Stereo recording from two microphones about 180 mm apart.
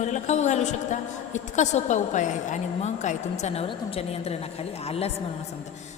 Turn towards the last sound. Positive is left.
turn(degrees=35)  # may be behind; listen again after turning